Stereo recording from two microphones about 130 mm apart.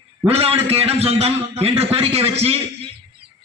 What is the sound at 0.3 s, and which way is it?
A man's voice, 50° right (ahead or behind).